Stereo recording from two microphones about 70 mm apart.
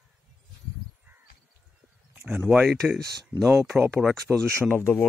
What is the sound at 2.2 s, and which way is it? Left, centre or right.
Speech, centre.